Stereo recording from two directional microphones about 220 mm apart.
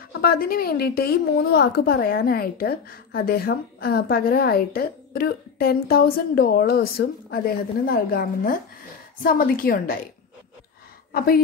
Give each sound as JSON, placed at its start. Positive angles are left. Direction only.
{"t": 0.1, "sound": "a woman's voice", "side_deg": 45}
{"t": 11.1, "sound": "a woman's voice", "side_deg": 40}